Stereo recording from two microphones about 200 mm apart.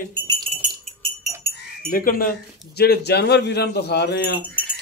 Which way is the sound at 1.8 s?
45° left (ahead or behind).